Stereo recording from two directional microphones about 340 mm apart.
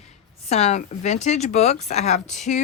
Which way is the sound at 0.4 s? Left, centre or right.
Centre.